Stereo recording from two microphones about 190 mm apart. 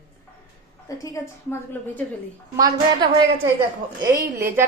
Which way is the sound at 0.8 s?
15° left (ahead or behind).